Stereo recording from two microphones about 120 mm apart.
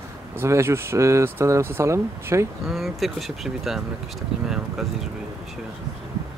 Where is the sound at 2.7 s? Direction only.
Centre (ahead or behind).